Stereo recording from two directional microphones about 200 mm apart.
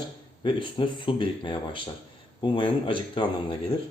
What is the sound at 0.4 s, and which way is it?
Speech, 25° left (ahead or behind).